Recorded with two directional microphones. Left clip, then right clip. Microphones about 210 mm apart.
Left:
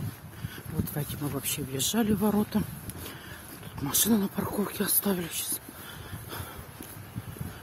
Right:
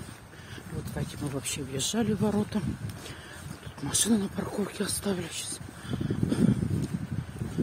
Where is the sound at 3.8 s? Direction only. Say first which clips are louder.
Left 1 dB; 15° left (ahead or behind).